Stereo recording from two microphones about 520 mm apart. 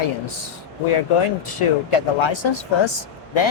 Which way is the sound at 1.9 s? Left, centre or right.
Left.